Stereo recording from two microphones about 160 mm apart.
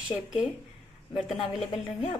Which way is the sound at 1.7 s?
30° left (ahead or behind).